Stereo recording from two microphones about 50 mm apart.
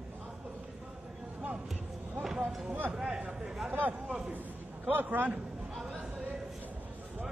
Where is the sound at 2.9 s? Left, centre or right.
Centre.